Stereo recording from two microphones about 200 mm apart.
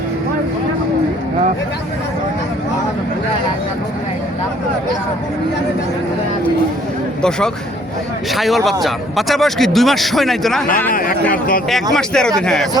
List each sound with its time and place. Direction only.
7.2 s speech: 5° left (ahead or behind)
10.9 s speech: 45° left (ahead or behind)
11.7 s speech: 5° left (ahead or behind)